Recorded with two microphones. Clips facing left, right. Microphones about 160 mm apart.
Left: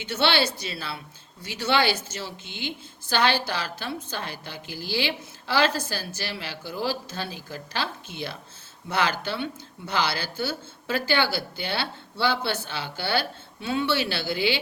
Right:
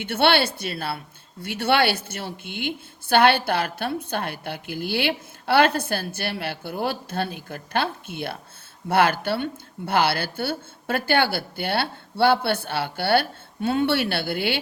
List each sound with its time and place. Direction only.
0.0 s speech: 55° right (ahead or behind)